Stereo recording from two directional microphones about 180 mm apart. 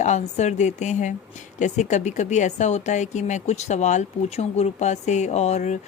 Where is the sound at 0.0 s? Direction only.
40° left (ahead or behind).